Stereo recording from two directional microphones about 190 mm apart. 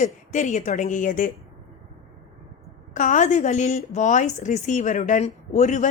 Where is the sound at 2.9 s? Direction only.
40° left (ahead or behind).